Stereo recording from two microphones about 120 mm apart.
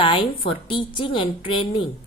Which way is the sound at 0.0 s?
45° left (ahead or behind).